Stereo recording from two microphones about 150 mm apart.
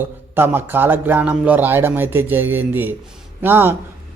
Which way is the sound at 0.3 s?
15° right (ahead or behind).